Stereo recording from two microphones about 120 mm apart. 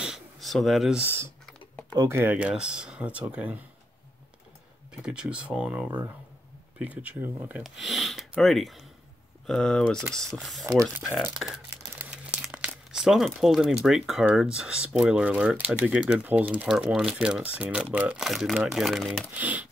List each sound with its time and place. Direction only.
0.0 s a sound: centre (ahead or behind)
1.0 s speech: 20° right (ahead or behind)
1.4 s typing: 10° left (ahead or behind)
2.0 s speech: 20° right (ahead or behind)
5.0 s speech: 5° right (ahead or behind)
7.6 s speech: centre (ahead or behind)
11.0 s crumpling: centre (ahead or behind)
12.4 s speech: 5° right (ahead or behind)
19.3 s speech: 10° right (ahead or behind)